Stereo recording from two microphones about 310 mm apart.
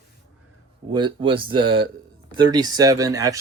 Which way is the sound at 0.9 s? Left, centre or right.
Centre.